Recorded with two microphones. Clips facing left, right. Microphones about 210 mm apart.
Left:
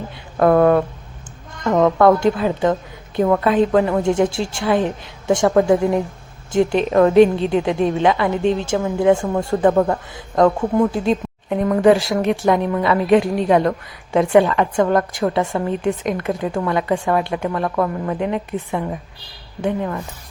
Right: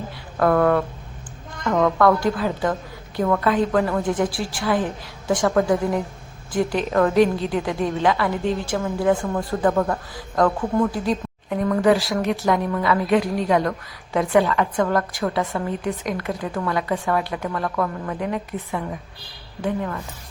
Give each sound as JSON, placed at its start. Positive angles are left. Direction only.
{"t": 0.3, "sound": "a woman's voice", "side_deg": 25}